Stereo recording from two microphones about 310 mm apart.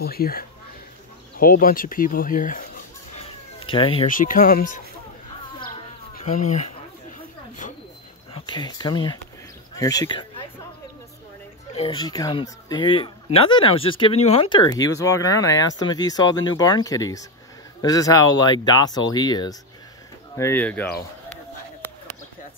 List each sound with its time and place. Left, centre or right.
0.0 s speech: left
7.6 s a sound: left
8.3 s speech: centre
11.7 s speech: centre